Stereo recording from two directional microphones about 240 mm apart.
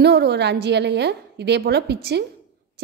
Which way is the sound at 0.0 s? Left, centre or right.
Right.